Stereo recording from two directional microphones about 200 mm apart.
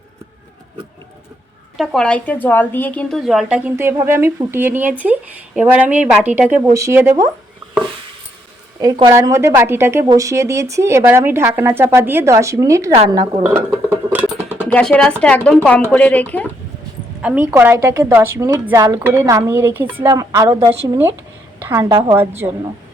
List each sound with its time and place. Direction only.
1.8 s a woman's voice: centre (ahead or behind)
8.8 s speech: 15° right (ahead or behind)
13.4 s dishes: 10° right (ahead or behind)
14.7 s a woman's voice: 5° left (ahead or behind)
17.5 s a woman's voice: 10° right (ahead or behind)